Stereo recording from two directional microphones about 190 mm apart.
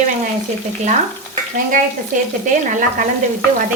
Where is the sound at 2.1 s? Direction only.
40° right (ahead or behind).